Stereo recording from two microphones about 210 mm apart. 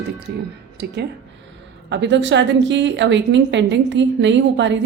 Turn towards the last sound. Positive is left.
turn(degrees=-60)  # may be behind; listen again after turning